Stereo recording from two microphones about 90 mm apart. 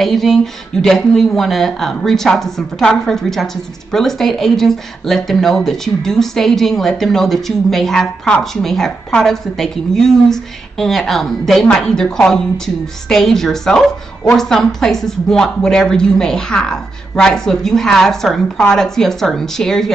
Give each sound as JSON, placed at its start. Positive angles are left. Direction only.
{"t": 0.0, "sound": "speech", "side_deg": 5}